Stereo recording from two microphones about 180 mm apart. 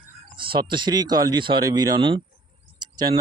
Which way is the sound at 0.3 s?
30° right (ahead or behind).